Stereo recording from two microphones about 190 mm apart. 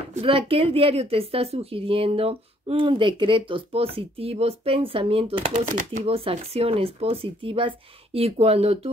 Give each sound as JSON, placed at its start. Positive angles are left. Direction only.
{"t": 0.1, "sound": "a woman's voice", "side_deg": -30}
{"t": 5.7, "sound": "speech", "side_deg": -40}